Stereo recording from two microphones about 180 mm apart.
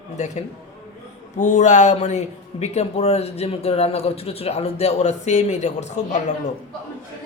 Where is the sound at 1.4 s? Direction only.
40° left (ahead or behind).